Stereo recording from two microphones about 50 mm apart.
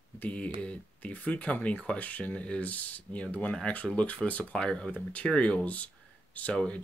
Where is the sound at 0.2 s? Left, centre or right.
Left.